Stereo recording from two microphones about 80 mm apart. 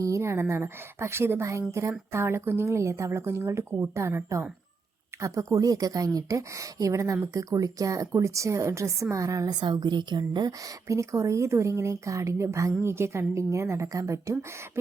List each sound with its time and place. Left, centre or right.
0.0 s a woman's voice: right
9.6 s a woman's voice: right
10.8 s a woman's voice: right